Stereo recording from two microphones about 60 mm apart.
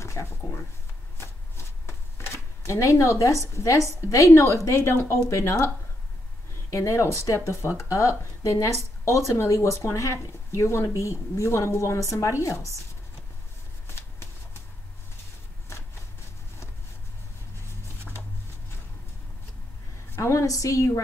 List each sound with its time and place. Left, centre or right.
0.0 s a sound: left
1.1 s shuffling cards: left
3.5 s a woman's voice: left
6.7 s speech: left
13.8 s shuffling cards: left
20.2 s speech: left